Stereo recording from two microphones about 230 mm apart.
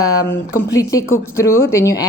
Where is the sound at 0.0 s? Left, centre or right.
Centre.